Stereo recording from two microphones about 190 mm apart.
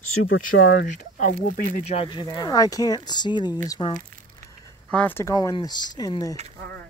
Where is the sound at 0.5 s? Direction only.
65° left (ahead or behind).